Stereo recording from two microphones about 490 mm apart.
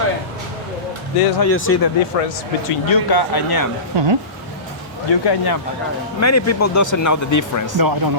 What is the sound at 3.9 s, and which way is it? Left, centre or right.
Speech, right.